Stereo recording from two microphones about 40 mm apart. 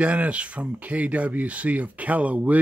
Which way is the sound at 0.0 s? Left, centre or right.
Right.